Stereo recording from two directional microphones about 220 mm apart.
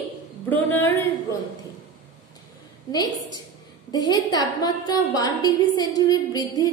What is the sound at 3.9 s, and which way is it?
A woman's voice, 20° left (ahead or behind).